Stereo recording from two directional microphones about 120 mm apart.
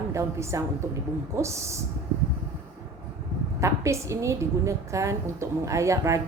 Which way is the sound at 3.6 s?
25° right (ahead or behind).